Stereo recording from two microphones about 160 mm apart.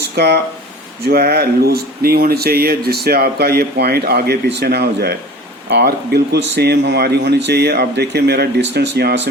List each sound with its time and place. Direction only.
0.2 s speech: 90° right
1.0 s speech: 80° right